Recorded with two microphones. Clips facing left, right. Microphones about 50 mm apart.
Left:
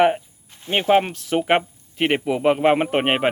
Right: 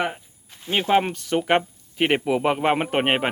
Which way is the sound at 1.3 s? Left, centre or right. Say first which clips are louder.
Left 2 dB; centre.